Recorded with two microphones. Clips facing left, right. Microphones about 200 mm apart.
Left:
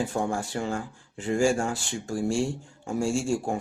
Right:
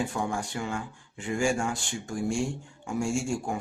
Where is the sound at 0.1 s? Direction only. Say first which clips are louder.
Left 3 dB; 35° left (ahead or behind).